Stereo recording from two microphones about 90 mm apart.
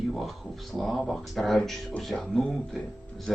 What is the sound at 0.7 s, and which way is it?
Speech, centre (ahead or behind).